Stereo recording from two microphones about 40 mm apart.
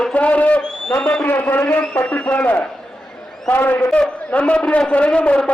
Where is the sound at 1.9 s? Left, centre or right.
Left.